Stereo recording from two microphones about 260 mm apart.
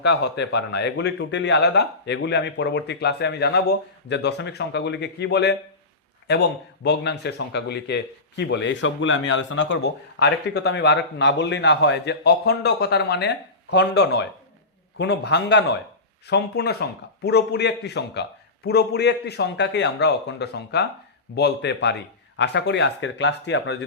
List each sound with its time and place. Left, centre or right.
0.0 s a man's voice: left